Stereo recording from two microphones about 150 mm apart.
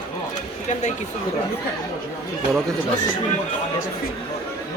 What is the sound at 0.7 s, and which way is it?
Speech, 50° left (ahead or behind).